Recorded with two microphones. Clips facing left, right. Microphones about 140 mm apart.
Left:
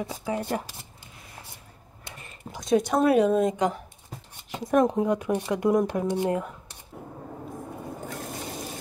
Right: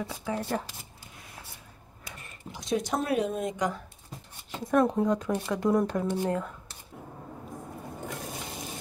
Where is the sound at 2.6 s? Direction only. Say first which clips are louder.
Left 7 dB; 65° left (ahead or behind); by 3.4 s 85° left.